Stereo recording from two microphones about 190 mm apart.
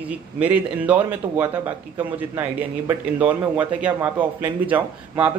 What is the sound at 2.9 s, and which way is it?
Speech, 10° right (ahead or behind).